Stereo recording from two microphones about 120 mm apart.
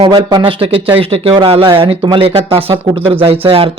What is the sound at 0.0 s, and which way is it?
Speech, 40° right (ahead or behind).